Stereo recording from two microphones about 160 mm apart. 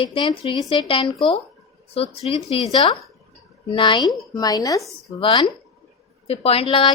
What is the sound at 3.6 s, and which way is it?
A woman's voice, 30° left (ahead or behind).